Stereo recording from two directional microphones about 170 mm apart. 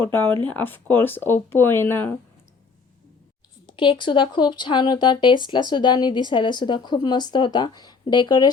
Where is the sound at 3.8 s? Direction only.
30° left (ahead or behind).